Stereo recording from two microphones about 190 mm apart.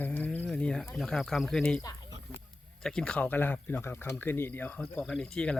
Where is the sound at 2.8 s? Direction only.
5° left (ahead or behind).